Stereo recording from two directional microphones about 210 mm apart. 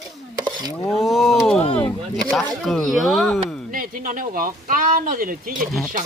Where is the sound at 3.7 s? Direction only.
40° right (ahead or behind).